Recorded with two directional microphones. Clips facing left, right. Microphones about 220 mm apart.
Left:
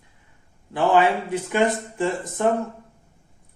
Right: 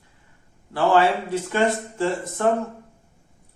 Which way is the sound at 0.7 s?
15° left (ahead or behind).